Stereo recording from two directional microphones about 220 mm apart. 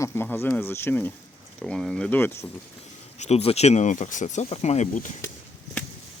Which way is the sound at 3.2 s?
30° left (ahead or behind).